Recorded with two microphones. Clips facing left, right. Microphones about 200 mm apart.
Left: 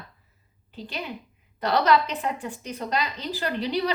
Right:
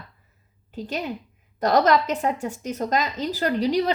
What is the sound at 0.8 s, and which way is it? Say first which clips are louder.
A woman's voice: right 5 dB; 40° right (ahead or behind).